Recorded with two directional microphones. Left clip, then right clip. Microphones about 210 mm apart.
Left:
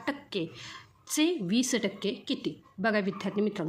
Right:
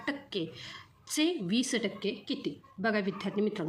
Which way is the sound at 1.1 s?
15° left (ahead or behind).